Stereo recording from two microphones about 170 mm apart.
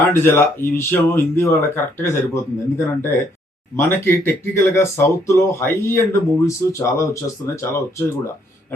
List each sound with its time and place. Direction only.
0.1 s speech: 15° left (ahead or behind)